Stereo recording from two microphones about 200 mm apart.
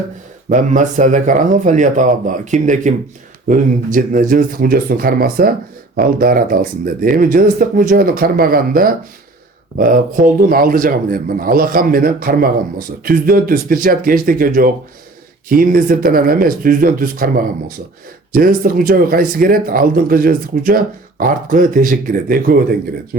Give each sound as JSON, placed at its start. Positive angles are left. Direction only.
{"t": 0.5, "sound": "speech", "side_deg": -40}